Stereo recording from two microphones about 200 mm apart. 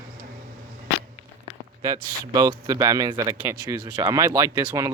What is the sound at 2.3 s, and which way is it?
Speech, 20° right (ahead or behind).